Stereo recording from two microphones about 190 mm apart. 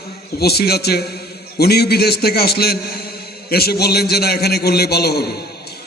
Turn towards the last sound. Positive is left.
turn(degrees=55)  # may be behind; listen again after turning